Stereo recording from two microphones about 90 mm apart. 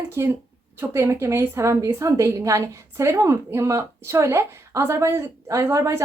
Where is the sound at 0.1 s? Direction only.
25° right (ahead or behind).